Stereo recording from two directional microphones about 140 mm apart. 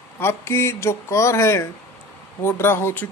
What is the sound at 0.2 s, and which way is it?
Speech, 20° left (ahead or behind).